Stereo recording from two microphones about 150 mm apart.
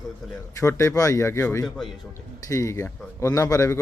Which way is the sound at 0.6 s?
20° left (ahead or behind).